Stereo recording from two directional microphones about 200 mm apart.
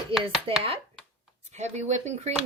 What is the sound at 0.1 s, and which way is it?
Speech, centre (ahead or behind).